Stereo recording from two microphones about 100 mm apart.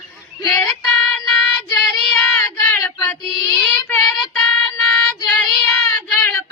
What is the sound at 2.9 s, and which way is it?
Child singing, 35° left (ahead or behind).